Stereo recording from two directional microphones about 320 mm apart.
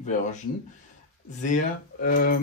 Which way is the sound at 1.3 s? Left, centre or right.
Left.